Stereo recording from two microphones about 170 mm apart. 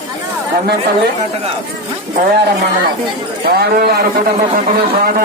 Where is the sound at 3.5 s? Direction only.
65° right (ahead or behind).